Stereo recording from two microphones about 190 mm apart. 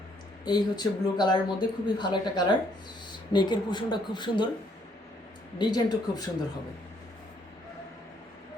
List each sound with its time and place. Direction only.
0.4 s speech: 20° left (ahead or behind)
5.5 s speech: 20° left (ahead or behind)